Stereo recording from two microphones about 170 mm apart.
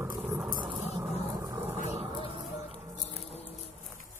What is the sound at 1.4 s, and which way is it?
Vehicle, 15° right (ahead or behind).